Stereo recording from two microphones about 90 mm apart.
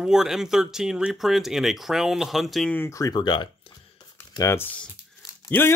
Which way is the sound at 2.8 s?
35° left (ahead or behind).